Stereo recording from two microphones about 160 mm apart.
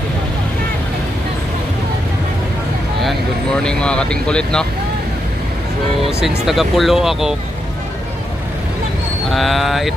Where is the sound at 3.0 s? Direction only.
5° left (ahead or behind).